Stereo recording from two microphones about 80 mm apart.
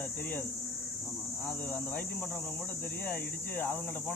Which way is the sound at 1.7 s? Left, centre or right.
Centre.